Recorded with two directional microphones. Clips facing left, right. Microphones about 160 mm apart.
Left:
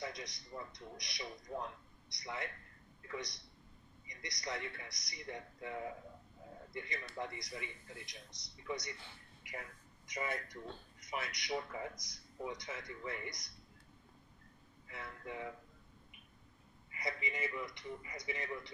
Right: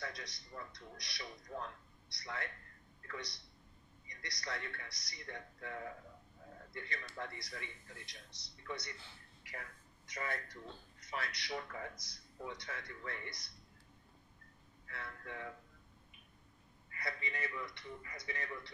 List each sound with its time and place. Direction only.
0.0 s a man's voice: 20° left (ahead or behind)
14.9 s a man's voice: 15° left (ahead or behind)
16.9 s a man's voice: 15° left (ahead or behind)